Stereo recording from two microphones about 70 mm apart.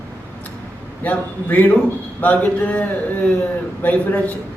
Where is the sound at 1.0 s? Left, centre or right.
Left.